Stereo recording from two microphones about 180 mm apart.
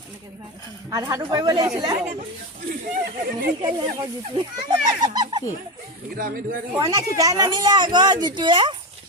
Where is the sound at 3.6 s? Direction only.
25° right (ahead or behind).